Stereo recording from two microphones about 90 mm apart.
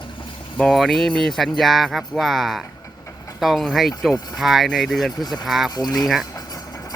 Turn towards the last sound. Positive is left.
turn(degrees=0)  # may be behind; listen again after turning